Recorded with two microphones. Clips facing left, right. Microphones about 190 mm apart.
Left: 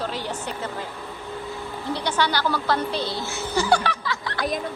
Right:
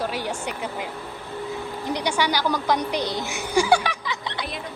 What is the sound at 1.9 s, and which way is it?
Speech, 10° right (ahead or behind).